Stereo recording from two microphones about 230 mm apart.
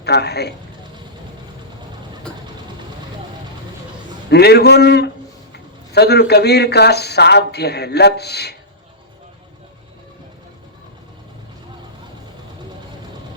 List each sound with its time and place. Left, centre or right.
0.0 s speech: left
4.3 s speech: left